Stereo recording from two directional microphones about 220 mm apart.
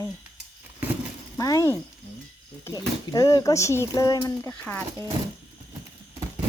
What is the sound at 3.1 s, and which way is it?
Speech, 15° left (ahead or behind).